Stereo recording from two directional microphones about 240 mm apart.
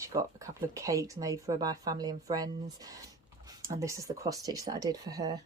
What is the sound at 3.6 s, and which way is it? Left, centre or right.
A woman's voice, centre.